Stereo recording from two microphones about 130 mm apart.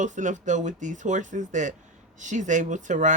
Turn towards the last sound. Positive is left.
turn(degrees=-70)  # may be behind; listen again after turning